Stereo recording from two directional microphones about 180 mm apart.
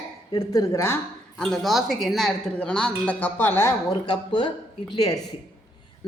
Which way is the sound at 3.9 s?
25° left (ahead or behind).